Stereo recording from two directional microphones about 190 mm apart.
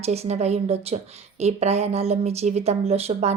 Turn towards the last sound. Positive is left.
turn(degrees=-35)  # may be behind; listen again after turning